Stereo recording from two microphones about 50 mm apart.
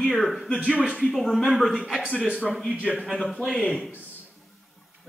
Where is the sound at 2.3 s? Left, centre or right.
Centre.